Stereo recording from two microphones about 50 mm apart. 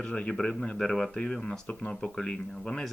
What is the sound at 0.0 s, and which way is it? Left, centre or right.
Speech, centre.